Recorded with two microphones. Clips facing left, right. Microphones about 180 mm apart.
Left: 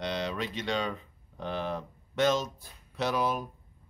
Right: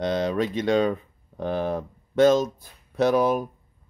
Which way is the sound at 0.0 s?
45° right (ahead or behind).